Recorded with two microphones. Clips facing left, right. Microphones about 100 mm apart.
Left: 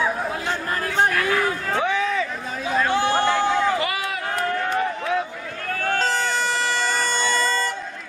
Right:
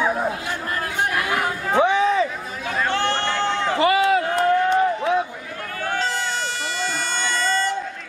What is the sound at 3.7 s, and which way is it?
Run, 25° right (ahead or behind).